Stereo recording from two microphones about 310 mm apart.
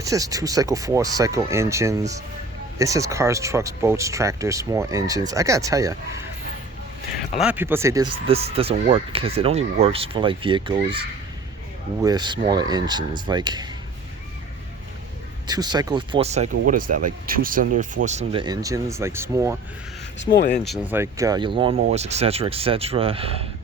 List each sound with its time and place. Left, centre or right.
0.0 s speech: centre
7.3 s speech: centre
8.3 s speech: centre
12.0 s speech: centre
15.4 s speech: centre
20.3 s speech: left
20.7 s speech: centre